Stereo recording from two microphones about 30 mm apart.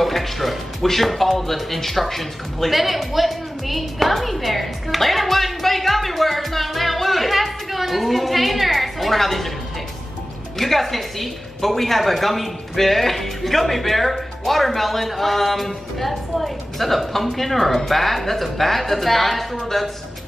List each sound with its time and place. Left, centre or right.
0.0 s a woman's voice: centre
10.6 s a woman's voice: centre